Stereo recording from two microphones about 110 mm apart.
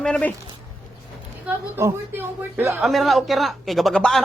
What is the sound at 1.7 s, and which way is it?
Speech, 25° right (ahead or behind).